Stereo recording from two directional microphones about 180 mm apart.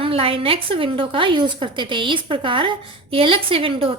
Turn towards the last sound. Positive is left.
turn(degrees=-30)  # may be behind; listen again after turning